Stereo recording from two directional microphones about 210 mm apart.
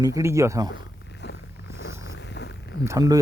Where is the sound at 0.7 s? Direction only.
55° left (ahead or behind).